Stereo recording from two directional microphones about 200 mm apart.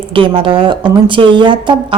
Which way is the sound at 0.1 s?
25° right (ahead or behind).